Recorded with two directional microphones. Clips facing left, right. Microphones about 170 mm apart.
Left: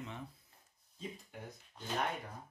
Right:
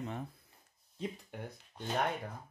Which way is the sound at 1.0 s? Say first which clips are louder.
Right 6 dB; 70° right (ahead or behind).